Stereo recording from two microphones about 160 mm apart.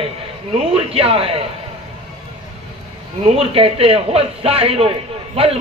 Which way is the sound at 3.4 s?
35° right (ahead or behind).